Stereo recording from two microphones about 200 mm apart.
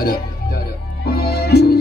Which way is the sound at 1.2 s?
50° left (ahead or behind).